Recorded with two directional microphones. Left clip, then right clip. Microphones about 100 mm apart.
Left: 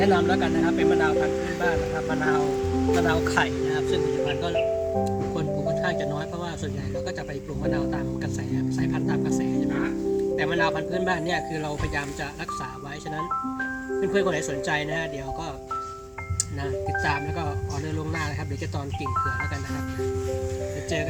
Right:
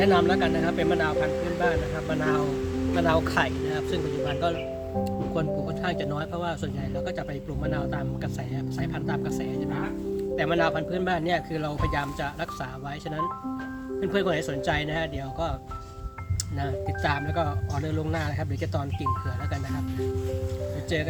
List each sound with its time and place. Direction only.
0.0 s speech: 40° right (ahead or behind)
2.4 s speech: 5° left (ahead or behind)
3.1 s speech: 30° right (ahead or behind)
7.7 s speech: 20° right (ahead or behind)
14.0 s speech: 30° right (ahead or behind)
17.0 s speech: 30° right (ahead or behind)